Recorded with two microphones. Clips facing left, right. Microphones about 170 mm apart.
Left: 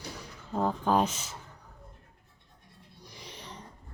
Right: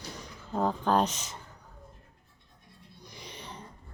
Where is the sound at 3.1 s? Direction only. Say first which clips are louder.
Right 1 dB; centre (ahead or behind).